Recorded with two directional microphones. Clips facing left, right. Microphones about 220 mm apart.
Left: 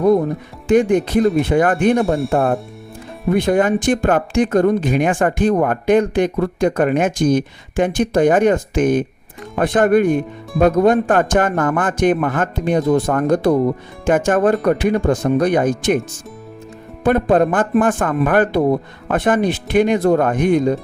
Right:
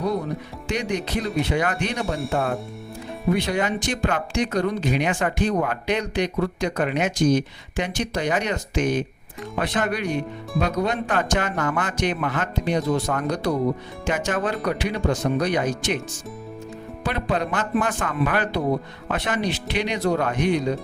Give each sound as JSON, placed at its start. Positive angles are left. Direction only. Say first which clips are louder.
{"t": 0.7, "sound": "speech", "louder": "left 12 dB", "side_deg": 50}
{"t": 3.3, "sound": "speech", "louder": "left 11 dB", "side_deg": 50}
{"t": 17.0, "sound": "speech", "louder": "left 11 dB", "side_deg": 50}